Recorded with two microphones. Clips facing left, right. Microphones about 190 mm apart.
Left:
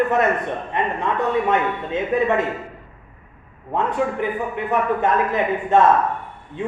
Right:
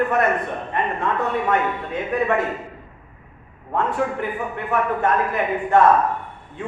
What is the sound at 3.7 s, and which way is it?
A man's voice, 20° left (ahead or behind).